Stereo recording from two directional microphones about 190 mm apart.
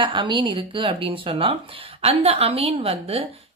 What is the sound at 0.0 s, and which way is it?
Speech, 25° right (ahead or behind).